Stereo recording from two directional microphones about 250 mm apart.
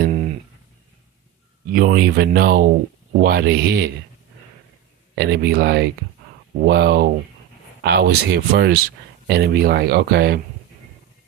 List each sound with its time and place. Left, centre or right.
0.0 s a sound: right
1.7 s speech: right
5.1 s speech: right